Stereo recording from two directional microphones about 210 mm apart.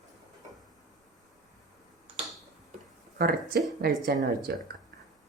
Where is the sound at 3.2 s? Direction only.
50° right (ahead or behind).